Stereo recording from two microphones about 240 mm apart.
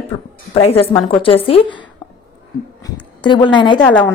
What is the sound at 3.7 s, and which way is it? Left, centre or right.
Speech, centre.